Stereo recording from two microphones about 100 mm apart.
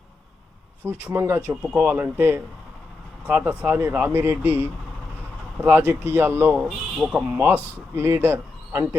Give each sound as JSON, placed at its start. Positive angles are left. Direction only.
{"t": 0.9, "sound": "speech", "side_deg": -20}
{"t": 1.5, "sound": "speech", "side_deg": -5}
{"t": 1.8, "sound": "speech", "side_deg": -20}